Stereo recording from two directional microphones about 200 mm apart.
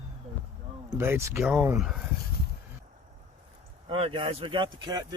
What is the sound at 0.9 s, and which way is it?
Speech, 10° right (ahead or behind).